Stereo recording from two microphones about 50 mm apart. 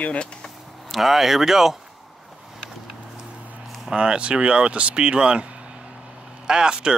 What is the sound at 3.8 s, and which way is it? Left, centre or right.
Speech, centre.